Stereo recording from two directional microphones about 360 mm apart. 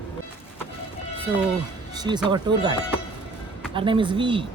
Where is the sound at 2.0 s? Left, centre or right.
Centre.